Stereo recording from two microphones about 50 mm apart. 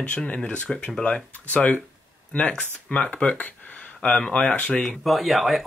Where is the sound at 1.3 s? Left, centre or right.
Left.